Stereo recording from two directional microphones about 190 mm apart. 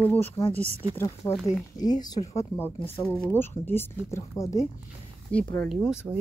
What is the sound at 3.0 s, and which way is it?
Speech, 10° left (ahead or behind).